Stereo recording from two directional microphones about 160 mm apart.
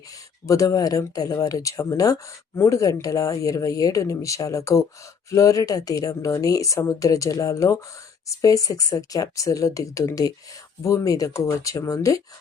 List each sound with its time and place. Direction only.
0.4 s speech: 20° left (ahead or behind)